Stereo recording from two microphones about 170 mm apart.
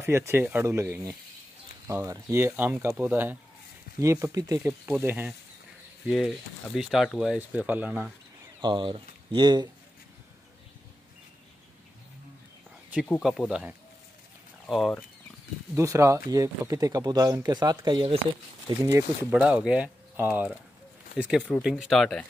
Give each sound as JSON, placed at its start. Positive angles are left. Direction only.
{"t": 0.0, "sound": "speech", "side_deg": -15}
{"t": 8.5, "sound": "speech", "side_deg": -30}
{"t": 13.2, "sound": "speech", "side_deg": 0}
{"t": 14.7, "sound": "speech", "side_deg": 0}
{"t": 15.7, "sound": "speech", "side_deg": -15}
{"t": 18.8, "sound": "speech", "side_deg": -20}
{"t": 19.4, "sound": "speech", "side_deg": -5}
{"t": 21.4, "sound": "speech", "side_deg": 5}